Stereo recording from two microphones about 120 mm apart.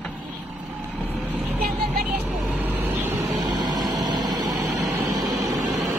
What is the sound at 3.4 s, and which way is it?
Vehicle, 35° right (ahead or behind).